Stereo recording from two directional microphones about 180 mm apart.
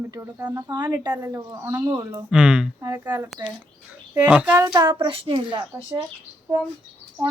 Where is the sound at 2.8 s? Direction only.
15° right (ahead or behind).